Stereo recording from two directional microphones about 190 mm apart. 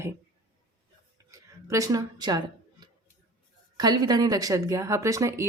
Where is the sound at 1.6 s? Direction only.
15° right (ahead or behind).